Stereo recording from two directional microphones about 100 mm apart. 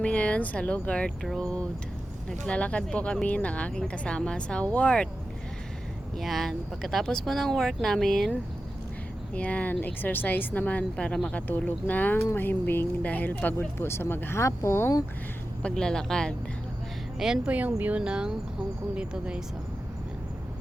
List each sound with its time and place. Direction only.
0.0 s speech: 10° left (ahead or behind)
6.1 s speech: centre (ahead or behind)
9.3 s speech: 15° left (ahead or behind)
15.6 s speech: 5° left (ahead or behind)
17.2 s speech: 5° right (ahead or behind)